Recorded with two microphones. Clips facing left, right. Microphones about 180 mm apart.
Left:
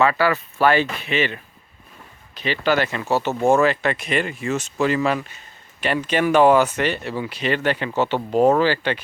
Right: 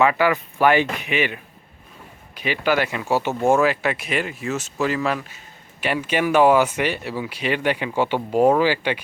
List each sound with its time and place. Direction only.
0.0 s speech: 15° right (ahead or behind)